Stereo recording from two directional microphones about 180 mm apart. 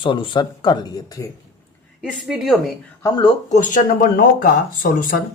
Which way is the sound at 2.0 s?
Centre (ahead or behind).